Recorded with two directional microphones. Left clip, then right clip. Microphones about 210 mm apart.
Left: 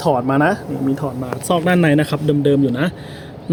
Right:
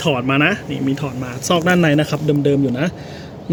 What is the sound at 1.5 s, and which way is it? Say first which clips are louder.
Speech: even; 15° left (ahead or behind).